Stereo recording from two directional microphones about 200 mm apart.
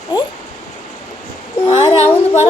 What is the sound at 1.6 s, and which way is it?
Speech, 25° left (ahead or behind).